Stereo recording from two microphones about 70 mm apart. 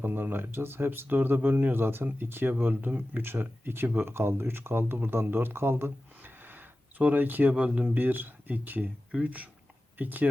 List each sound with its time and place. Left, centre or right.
0.0 s speech: right